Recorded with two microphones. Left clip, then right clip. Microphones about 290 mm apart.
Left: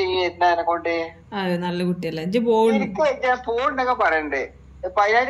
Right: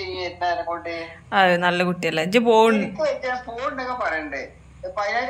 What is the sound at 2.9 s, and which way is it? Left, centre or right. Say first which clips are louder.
A woman's voice: left 4 dB; centre.